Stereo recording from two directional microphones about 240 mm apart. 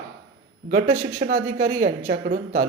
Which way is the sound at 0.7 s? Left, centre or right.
Right.